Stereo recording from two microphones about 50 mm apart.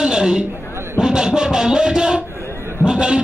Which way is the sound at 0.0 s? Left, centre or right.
Centre.